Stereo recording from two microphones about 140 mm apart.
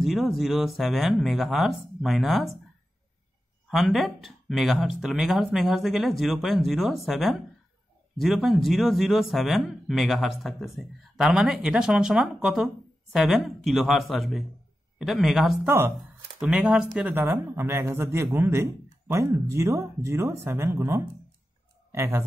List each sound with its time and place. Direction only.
0.0 s speech: centre (ahead or behind)
3.6 s speech: centre (ahead or behind)
15.6 s speech: 15° right (ahead or behind)